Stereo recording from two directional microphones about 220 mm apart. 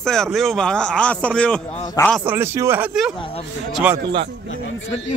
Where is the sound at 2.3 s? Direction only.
10° right (ahead or behind).